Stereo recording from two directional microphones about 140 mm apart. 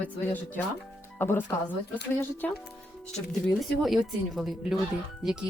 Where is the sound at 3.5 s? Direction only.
Centre (ahead or behind).